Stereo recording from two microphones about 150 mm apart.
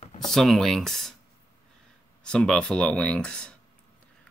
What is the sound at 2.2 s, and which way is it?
Speech, 5° left (ahead or behind).